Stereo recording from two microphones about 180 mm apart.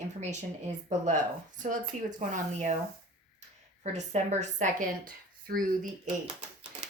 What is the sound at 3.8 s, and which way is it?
A woman's voice, 40° right (ahead or behind).